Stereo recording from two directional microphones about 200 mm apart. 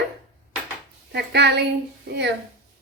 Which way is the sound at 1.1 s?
55° right (ahead or behind).